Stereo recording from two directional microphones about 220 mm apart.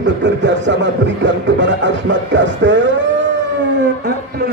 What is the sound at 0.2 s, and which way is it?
Music, 55° right (ahead or behind).